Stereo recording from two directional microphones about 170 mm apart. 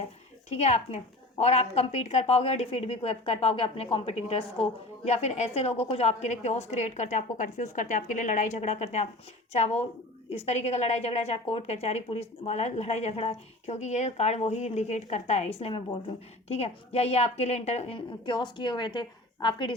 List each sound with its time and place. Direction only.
0.5 s a woman's voice: 40° left (ahead or behind)